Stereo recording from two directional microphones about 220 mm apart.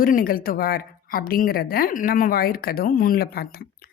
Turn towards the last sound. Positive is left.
turn(degrees=45)  # may be behind; listen again after turning